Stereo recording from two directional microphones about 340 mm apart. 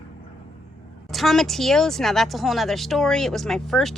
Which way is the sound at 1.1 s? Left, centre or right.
Centre.